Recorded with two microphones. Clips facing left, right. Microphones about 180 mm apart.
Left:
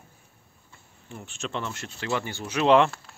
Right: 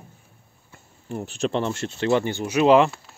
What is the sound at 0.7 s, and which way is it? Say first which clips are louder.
Speech: right 11 dB; 40° right (ahead or behind).